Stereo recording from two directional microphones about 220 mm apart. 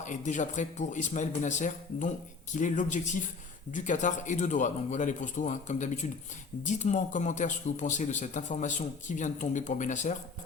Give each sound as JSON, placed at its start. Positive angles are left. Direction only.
{"t": 0.0, "sound": "a man's voice", "side_deg": 35}